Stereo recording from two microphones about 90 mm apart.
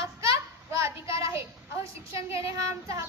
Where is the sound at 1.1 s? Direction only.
35° right (ahead or behind).